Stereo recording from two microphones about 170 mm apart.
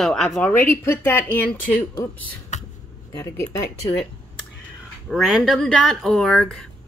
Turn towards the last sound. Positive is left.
turn(degrees=5)  # may be behind; listen again after turning